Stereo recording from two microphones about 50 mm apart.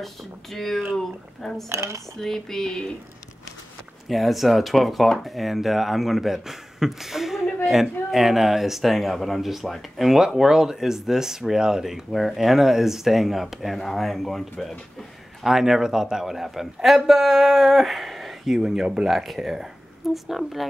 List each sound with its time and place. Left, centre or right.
0.0 s speech: centre
1.7 s dishes: right
2.2 s a sound: centre
4.1 s speech: centre
15.4 s speech: centre